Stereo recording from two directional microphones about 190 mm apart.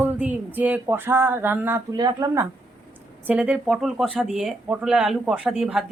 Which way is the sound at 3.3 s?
5° right (ahead or behind).